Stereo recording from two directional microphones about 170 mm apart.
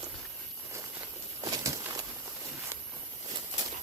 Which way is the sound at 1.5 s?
20° right (ahead or behind).